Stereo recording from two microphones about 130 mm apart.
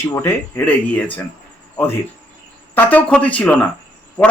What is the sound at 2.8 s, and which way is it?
Speech, 10° left (ahead or behind).